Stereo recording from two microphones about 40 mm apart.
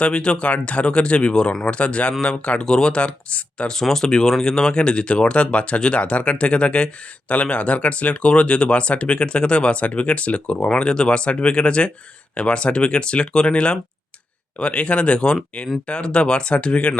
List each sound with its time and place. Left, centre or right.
0.0 s speech: left
3.7 s speech: centre; by 17.0 s left